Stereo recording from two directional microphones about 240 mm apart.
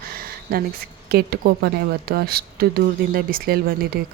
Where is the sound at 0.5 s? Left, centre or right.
Right.